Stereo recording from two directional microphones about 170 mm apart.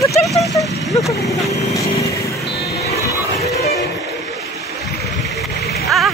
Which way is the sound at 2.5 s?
70° left (ahead or behind).